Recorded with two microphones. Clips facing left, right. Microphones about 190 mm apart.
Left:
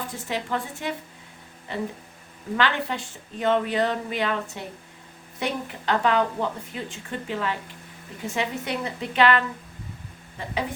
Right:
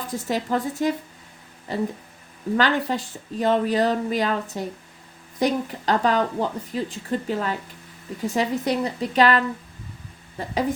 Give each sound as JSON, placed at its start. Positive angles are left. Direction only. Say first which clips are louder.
{"t": 0.1, "sound": "a woman's voice", "louder": "right 8 dB", "side_deg": -40}